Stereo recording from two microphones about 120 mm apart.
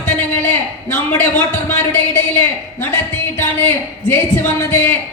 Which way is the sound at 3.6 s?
20° left (ahead or behind).